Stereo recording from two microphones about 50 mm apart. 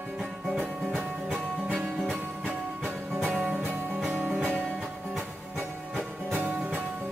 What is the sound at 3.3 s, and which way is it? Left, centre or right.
Music, right.